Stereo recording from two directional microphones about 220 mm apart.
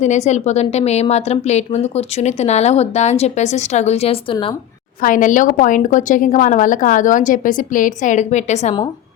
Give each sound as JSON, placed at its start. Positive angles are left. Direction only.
{"t": 0.0, "sound": "a woman's voice", "side_deg": 30}
{"t": 5.0, "sound": "a woman's voice", "side_deg": 35}